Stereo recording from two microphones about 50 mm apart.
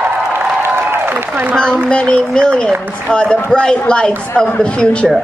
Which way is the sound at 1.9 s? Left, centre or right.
Centre.